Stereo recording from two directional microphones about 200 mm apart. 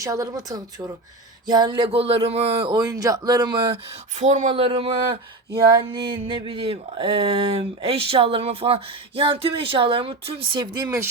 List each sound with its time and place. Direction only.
0.0 s a woman's voice: 15° right (ahead or behind)
1.5 s a sound: 20° right (ahead or behind)
10.8 s a woman's voice: 10° right (ahead or behind)